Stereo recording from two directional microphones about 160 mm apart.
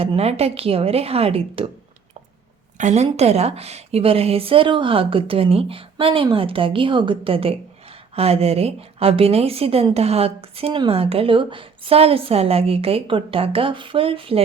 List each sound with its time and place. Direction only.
0.0 s a woman's voice: 40° right (ahead or behind)
2.7 s a woman's voice: 45° right (ahead or behind)